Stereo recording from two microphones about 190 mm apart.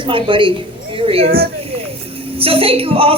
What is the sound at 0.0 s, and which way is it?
A woman's voice, 25° right (ahead or behind).